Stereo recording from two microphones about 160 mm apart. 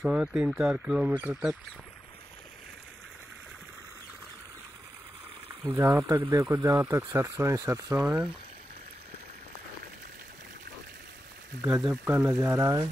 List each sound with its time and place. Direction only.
0.0 s speech: 5° right (ahead or behind)
5.6 s speech: 15° right (ahead or behind)
11.6 s speech: 5° right (ahead or behind)